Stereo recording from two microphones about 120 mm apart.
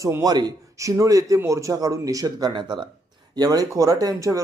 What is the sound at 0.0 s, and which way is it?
Speech, 25° right (ahead or behind).